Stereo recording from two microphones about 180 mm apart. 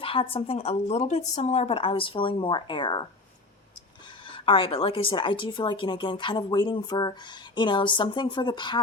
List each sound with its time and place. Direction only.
0.0 s speech: 30° left (ahead or behind)
4.3 s a woman's voice: 30° left (ahead or behind)